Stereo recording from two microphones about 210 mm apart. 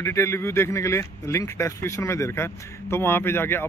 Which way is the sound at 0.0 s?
15° left (ahead or behind).